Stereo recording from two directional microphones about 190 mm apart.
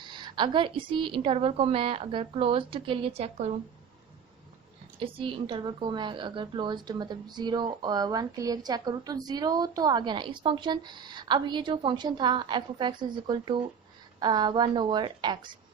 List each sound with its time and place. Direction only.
0.0 s speech: 25° right (ahead or behind)
4.9 s speech: 30° right (ahead or behind)